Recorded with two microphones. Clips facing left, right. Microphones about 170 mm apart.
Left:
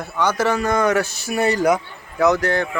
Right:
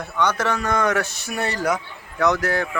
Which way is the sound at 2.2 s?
Centre (ahead or behind).